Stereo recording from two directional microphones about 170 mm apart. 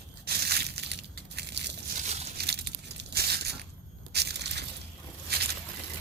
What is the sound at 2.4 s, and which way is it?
Tearing, 75° right (ahead or behind).